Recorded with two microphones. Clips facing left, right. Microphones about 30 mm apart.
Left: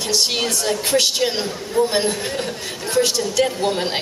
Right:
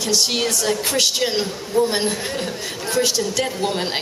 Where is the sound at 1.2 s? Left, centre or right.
Centre.